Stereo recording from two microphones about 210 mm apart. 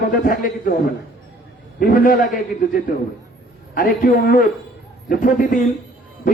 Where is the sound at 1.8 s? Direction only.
40° left (ahead or behind).